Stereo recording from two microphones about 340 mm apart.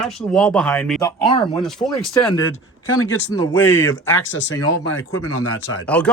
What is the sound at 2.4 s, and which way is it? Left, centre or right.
Speech, left.